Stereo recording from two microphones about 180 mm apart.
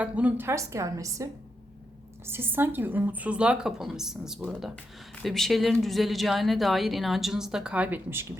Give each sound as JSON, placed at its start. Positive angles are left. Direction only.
{"t": 0.0, "sound": "a woman's voice", "side_deg": -10}